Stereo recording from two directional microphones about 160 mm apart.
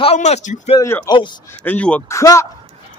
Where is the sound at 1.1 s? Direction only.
30° left (ahead or behind).